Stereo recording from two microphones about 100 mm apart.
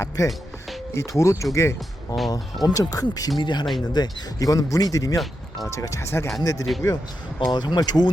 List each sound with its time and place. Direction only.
0.2 s speech: 30° left (ahead or behind)
2.3 s speech: 40° left (ahead or behind)
5.1 s speech: centre (ahead or behind)
5.7 s speech: 30° left (ahead or behind)
6.9 s speech: 45° left (ahead or behind)